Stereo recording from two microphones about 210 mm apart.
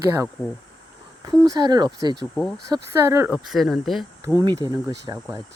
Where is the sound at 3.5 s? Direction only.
Centre (ahead or behind).